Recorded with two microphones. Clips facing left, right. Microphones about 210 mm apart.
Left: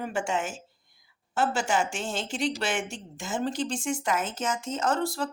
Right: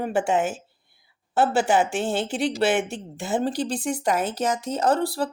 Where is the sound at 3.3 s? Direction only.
35° right (ahead or behind).